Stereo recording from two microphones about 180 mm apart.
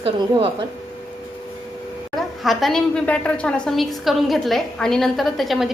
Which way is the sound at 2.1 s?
Centre (ahead or behind).